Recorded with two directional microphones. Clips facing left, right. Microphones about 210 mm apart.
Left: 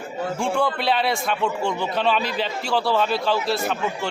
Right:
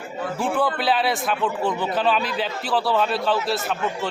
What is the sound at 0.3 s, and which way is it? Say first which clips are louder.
A man's voice: right 1 dB; 5° right (ahead or behind).